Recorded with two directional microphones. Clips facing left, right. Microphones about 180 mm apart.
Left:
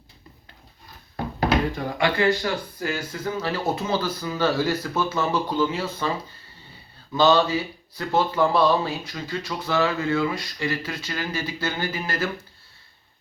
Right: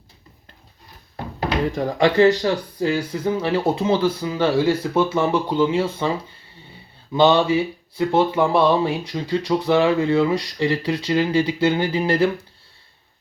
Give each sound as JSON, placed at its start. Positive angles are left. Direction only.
{"t": 1.7, "sound": "speech", "side_deg": -35}
{"t": 7.2, "sound": "speech", "side_deg": -25}